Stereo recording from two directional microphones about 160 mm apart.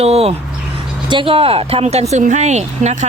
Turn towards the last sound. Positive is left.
turn(degrees=-45)  # may be behind; listen again after turning